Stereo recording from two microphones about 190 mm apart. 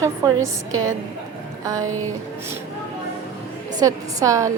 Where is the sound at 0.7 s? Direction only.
90° right.